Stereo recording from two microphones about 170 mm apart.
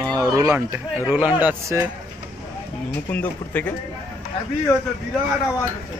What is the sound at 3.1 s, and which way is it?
Speech, 10° left (ahead or behind).